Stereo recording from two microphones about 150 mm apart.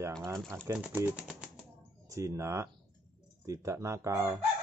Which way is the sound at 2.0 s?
20° right (ahead or behind).